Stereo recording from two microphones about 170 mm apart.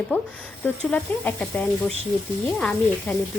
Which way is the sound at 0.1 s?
10° left (ahead or behind).